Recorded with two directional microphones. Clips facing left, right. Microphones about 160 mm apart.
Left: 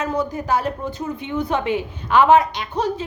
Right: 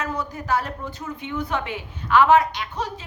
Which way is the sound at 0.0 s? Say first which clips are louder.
Left 6 dB; 20° left (ahead or behind).